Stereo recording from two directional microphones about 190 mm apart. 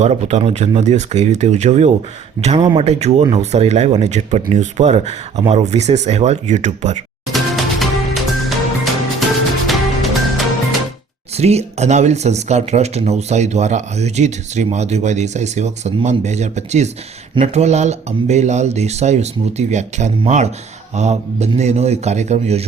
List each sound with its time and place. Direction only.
0.0 s speech: 35° right (ahead or behind)
7.3 s music: centre (ahead or behind)
11.3 s speech: 35° right (ahead or behind)